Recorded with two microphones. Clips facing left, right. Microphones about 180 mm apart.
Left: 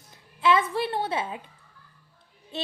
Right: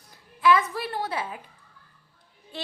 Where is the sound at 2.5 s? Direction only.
25° left (ahead or behind).